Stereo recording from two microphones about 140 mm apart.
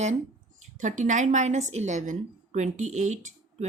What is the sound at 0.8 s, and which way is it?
A woman's voice, 65° right (ahead or behind).